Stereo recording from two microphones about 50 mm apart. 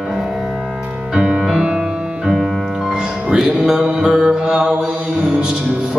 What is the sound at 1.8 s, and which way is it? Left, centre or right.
Music, centre.